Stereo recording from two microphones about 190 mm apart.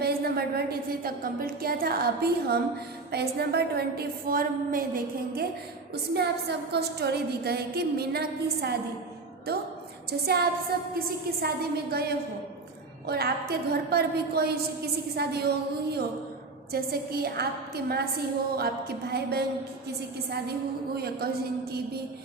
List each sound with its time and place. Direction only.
0.0 s a woman's voice: 55° right (ahead or behind)
11.4 s a woman's voice: 55° right (ahead or behind)
20.9 s a woman's voice: 55° right (ahead or behind)